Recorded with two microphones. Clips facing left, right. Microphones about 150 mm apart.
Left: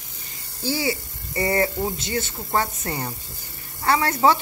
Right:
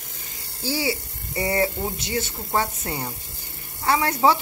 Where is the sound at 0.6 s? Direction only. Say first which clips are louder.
Left 1 dB; 10° right (ahead or behind).